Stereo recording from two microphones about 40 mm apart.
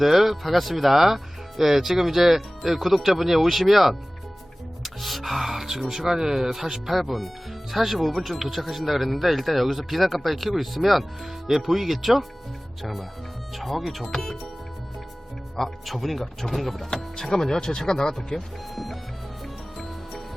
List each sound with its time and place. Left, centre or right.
0.0 s speech: centre
15.5 s speech: centre
16.9 s speech: centre
18.3 s speech: centre